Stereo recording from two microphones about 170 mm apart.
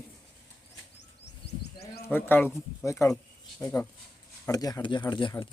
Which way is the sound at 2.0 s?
10° left (ahead or behind).